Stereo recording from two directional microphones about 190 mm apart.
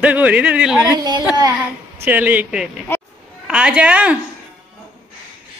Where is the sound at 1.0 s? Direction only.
20° right (ahead or behind).